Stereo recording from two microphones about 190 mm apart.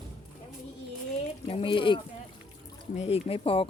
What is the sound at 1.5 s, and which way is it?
Speech, 30° left (ahead or behind).